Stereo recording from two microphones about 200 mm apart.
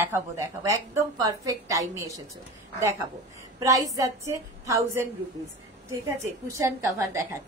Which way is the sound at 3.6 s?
15° right (ahead or behind).